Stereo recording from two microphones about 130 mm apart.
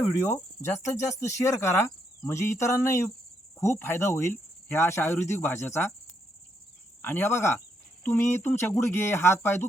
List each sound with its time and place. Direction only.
0.1 s speech: 20° left (ahead or behind)
7.0 s speech: 15° left (ahead or behind)